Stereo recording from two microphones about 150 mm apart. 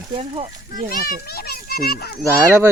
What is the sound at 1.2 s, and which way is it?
Children playing, 90° left.